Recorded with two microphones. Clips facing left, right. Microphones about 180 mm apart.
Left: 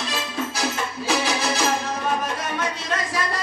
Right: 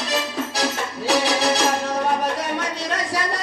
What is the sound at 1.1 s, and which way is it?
Music, 70° right (ahead or behind).